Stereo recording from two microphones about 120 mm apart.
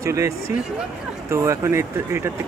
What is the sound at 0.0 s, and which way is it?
Speech, 25° right (ahead or behind).